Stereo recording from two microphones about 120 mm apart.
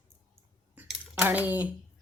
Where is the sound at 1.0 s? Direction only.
15° right (ahead or behind).